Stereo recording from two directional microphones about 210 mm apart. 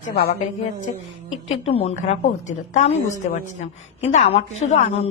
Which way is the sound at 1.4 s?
30° left (ahead or behind).